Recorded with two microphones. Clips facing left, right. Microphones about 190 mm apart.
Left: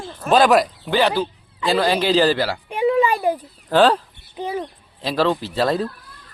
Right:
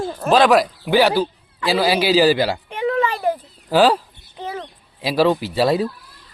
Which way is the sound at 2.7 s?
10° left (ahead or behind).